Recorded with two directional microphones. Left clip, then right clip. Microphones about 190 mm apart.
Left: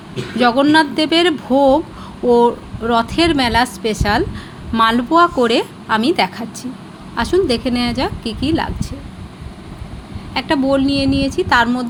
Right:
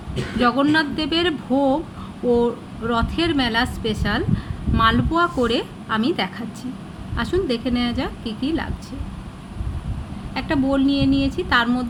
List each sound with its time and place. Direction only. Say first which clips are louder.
0.3 s a woman's voice: left 6 dB; 20° left (ahead or behind)
10.3 s a woman's voice: left 6 dB; 20° left (ahead or behind)